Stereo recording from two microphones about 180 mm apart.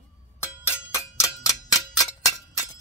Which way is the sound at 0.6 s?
15° left (ahead or behind).